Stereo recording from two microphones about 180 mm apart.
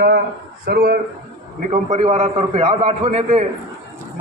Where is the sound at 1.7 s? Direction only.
40° right (ahead or behind).